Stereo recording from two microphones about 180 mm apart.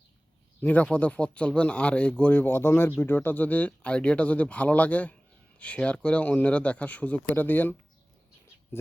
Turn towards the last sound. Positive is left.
turn(degrees=10)  # may be behind; listen again after turning